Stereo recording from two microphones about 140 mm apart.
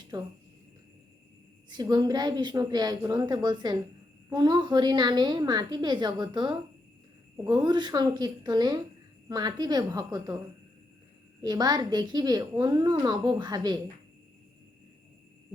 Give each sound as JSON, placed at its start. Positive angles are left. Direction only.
{"t": 0.1, "sound": "a woman's voice", "side_deg": -30}
{"t": 1.7, "sound": "a woman's voice", "side_deg": -30}
{"t": 11.4, "sound": "a woman's voice", "side_deg": -30}